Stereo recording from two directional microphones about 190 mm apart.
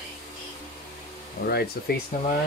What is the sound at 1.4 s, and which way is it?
Speech, 55° left (ahead or behind).